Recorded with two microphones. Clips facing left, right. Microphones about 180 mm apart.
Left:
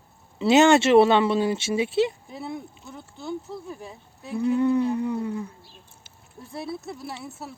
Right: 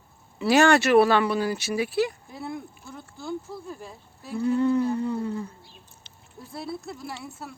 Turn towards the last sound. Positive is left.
turn(degrees=0)  # may be behind; listen again after turning